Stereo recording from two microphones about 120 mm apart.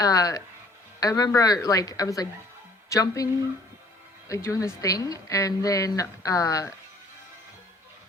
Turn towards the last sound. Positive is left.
turn(degrees=25)  # may be behind; listen again after turning